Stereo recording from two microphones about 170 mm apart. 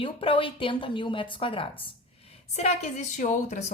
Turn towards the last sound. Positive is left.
turn(degrees=45)  # may be behind; listen again after turning